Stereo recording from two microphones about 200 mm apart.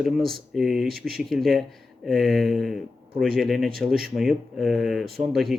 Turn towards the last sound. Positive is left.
turn(degrees=0)  # may be behind; listen again after turning